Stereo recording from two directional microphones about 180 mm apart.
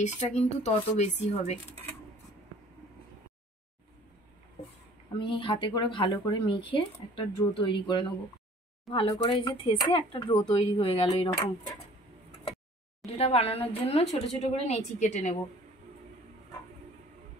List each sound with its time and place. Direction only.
0.0 s speech: 40° left (ahead or behind)
5.2 s speech: 25° left (ahead or behind)
13.0 s speech: 35° left (ahead or behind)